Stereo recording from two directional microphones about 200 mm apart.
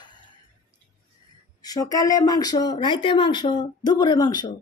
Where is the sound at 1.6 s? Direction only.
15° left (ahead or behind).